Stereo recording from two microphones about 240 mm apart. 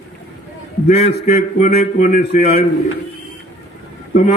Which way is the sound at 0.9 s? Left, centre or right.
Left.